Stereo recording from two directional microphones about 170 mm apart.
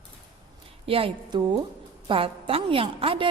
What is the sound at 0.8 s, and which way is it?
A woman's voice, 35° right (ahead or behind).